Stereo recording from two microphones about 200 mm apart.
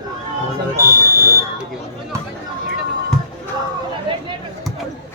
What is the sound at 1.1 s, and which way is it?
Smoke detector, 15° left (ahead or behind).